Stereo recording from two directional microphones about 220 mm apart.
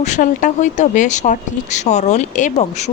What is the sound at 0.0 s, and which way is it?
Speech, 35° left (ahead or behind).